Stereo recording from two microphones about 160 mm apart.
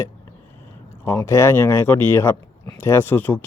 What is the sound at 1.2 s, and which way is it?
Speech, 15° left (ahead or behind).